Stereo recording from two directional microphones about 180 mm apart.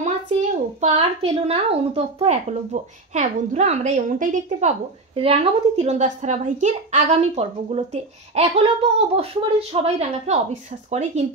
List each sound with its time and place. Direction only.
0.0 s a woman's voice: 40° right (ahead or behind)